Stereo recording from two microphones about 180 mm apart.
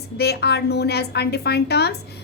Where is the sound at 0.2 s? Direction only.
65° left (ahead or behind).